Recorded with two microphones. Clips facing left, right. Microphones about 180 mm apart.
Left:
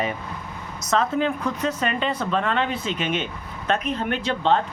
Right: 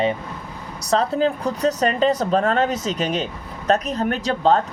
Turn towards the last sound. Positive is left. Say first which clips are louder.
# right 3 dB
turn(degrees=-40)  # may be behind; listen again after turning